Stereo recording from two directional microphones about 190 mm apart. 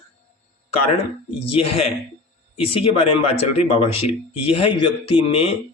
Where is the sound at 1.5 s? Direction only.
30° left (ahead or behind).